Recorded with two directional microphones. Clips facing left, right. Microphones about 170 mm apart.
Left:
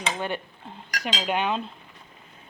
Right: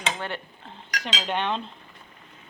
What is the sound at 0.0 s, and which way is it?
Dishes, 15° left (ahead or behind).